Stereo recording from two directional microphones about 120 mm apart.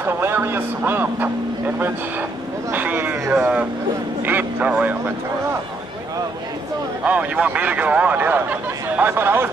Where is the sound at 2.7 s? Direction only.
15° right (ahead or behind).